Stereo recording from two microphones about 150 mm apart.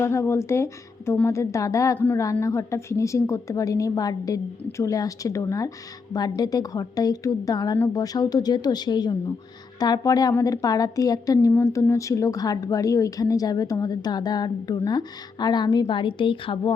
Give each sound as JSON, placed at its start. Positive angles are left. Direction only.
{"t": 0.0, "sound": "a woman's voice", "side_deg": 20}